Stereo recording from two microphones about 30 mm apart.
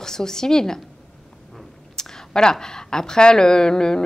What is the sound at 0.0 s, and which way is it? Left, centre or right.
Speech, centre.